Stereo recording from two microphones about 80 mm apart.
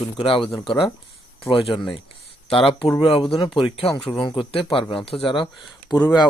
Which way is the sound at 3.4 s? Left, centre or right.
Left.